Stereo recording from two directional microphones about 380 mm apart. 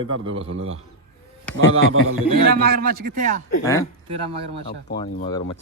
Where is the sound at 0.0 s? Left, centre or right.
Centre.